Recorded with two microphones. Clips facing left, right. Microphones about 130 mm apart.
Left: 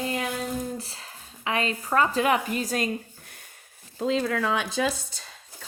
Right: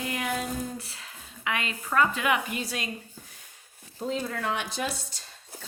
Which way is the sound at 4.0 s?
90° left.